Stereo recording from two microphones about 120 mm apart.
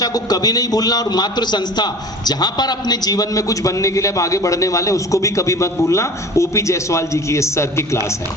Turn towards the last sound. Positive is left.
turn(degrees=25)  # may be behind; listen again after turning